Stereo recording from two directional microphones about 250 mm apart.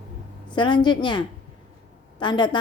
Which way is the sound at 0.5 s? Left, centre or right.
Centre.